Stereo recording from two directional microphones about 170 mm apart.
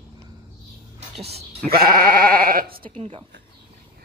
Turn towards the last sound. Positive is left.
turn(degrees=-30)  # may be behind; listen again after turning